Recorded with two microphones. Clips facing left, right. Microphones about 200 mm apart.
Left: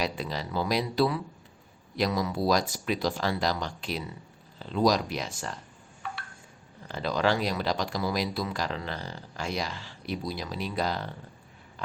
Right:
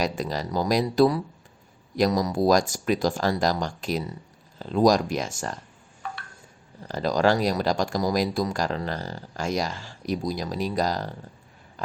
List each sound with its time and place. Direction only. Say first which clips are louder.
0.0 s speech: right 4 dB; 45° right (ahead or behind)
6.8 s speech: right 5 dB; 40° right (ahead or behind)